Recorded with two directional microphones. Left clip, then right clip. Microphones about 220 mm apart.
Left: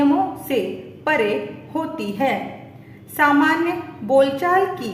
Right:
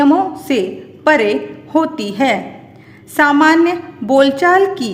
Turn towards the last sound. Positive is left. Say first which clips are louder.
# right 7 dB
turn(degrees=-50)  # may be behind; listen again after turning